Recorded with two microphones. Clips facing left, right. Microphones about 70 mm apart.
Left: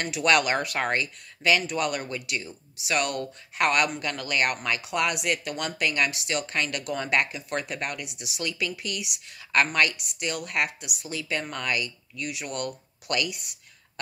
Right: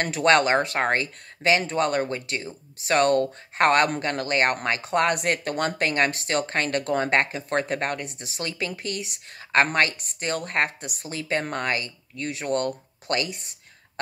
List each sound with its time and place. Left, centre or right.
0.0 s speech: right